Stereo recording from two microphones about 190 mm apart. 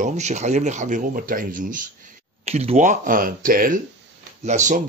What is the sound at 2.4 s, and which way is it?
Speech, 35° right (ahead or behind).